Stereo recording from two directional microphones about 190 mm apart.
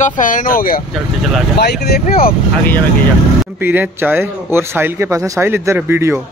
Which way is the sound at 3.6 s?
10° right (ahead or behind).